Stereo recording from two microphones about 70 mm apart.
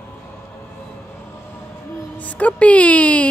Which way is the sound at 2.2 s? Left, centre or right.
Left.